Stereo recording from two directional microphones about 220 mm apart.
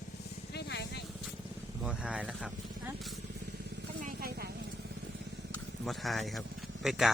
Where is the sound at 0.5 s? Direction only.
50° left (ahead or behind).